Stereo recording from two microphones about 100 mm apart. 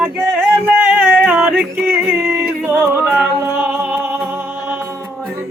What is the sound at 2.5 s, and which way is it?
Yodeling, 20° right (ahead or behind).